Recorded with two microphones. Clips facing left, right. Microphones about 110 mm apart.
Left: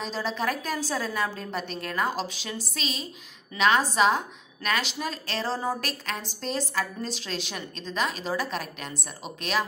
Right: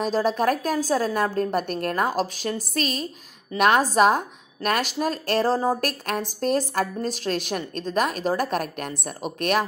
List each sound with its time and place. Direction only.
0.0 s a woman's voice: 50° right (ahead or behind)